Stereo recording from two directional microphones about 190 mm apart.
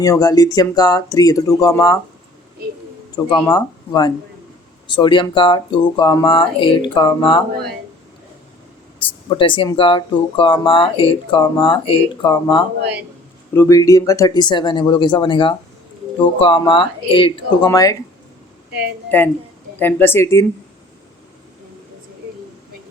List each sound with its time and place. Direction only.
0.0 s speech: 20° left (ahead or behind)
3.2 s speech: 20° left (ahead or behind)
9.0 s speech: 25° left (ahead or behind)
19.1 s speech: 10° left (ahead or behind)